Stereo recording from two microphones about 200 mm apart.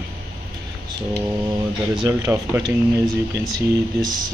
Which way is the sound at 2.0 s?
15° right (ahead or behind).